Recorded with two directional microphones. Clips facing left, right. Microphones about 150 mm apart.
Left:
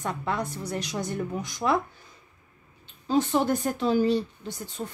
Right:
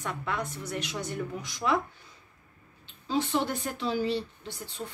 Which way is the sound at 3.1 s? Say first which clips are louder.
Left 5 dB; 45° left (ahead or behind).